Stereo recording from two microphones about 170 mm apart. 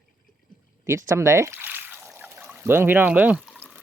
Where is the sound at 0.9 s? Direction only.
15° right (ahead or behind).